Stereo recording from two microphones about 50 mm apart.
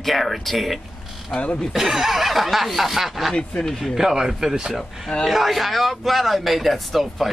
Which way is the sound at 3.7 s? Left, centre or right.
Centre.